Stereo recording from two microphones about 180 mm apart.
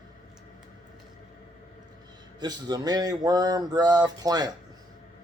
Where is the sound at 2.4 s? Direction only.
20° right (ahead or behind).